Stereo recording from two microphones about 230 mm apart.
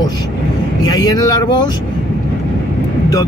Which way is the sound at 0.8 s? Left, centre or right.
Centre.